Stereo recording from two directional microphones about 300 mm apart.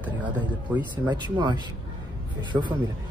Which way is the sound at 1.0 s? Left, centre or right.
Centre.